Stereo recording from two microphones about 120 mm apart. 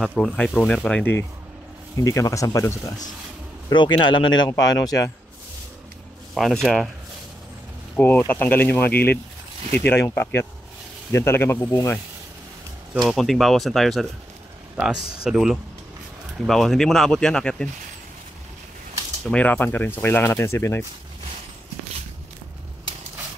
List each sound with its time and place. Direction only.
0.0 s speech: 5° left (ahead or behind)
2.0 s speech: 25° left (ahead or behind)
3.7 s a man's voice: 40° left (ahead or behind)
4.5 s a man's voice: 30° left (ahead or behind)
6.3 s speech: 5° left (ahead or behind)
7.9 s speech: 15° left (ahead or behind)
13.0 s speech: centre (ahead or behind)
19.3 s speech: 15° left (ahead or behind)